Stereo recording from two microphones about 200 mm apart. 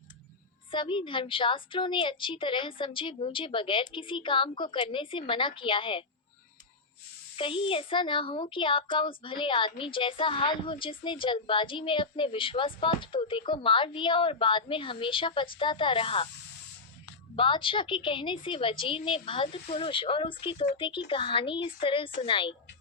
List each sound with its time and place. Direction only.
0.7 s speech: 25° left (ahead or behind)
7.3 s speech: 25° left (ahead or behind)
17.3 s speech: 25° left (ahead or behind)